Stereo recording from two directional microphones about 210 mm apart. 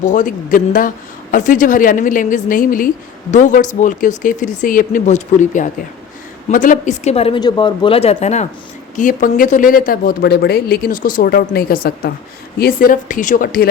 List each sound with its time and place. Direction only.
0.0 s speech: 35° left (ahead or behind)